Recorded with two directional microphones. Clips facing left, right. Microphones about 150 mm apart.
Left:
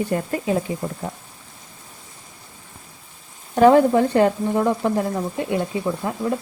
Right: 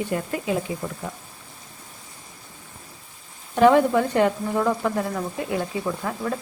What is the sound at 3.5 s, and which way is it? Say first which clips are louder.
Speech: left 3 dB; 35° left (ahead or behind).